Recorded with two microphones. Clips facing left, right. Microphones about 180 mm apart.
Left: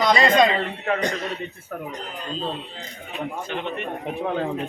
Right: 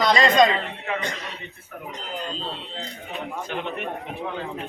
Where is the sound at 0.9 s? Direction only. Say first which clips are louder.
Left 7 dB; 45° left (ahead or behind).